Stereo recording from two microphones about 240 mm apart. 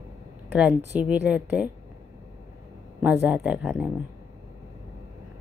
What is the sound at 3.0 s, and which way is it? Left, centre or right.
Speech, centre.